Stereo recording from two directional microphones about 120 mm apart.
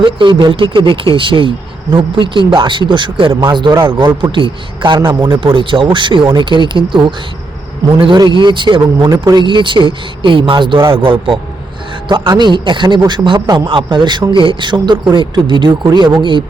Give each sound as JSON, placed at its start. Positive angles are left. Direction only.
{"t": 0.0, "sound": "a man's voice", "side_deg": -40}
{"t": 9.0, "sound": "a man's voice", "side_deg": -30}